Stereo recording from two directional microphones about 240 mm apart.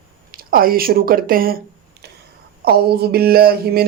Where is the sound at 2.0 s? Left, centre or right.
Right.